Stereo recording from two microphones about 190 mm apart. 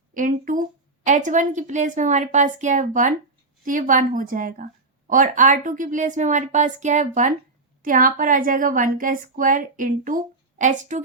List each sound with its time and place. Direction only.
0.1 s a woman's voice: 45° right (ahead or behind)